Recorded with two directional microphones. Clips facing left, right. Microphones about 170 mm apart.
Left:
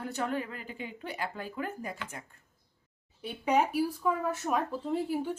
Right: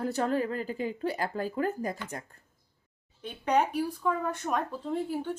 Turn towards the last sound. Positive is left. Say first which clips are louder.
# even
turn(degrees=10)  # may be behind; listen again after turning